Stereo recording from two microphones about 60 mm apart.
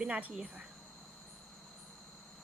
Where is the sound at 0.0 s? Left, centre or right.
Right.